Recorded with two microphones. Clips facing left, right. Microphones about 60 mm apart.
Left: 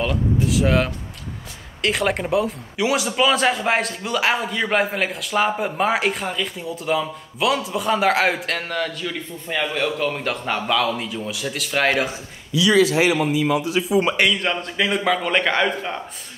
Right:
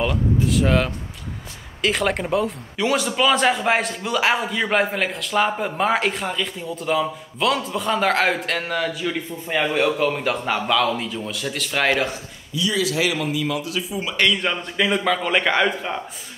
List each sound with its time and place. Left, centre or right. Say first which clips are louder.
0.0 s speech: even; centre
12.8 s a man's voice: left 4 dB; left
14.2 s speech: even; centre